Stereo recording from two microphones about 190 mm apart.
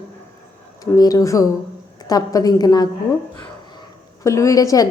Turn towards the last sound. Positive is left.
turn(degrees=20)  # may be behind; listen again after turning